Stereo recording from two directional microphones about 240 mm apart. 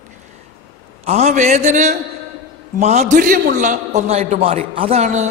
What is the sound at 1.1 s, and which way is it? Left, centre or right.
A man's voice, right.